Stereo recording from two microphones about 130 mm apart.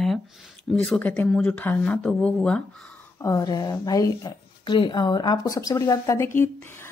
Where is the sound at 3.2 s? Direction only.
25° left (ahead or behind).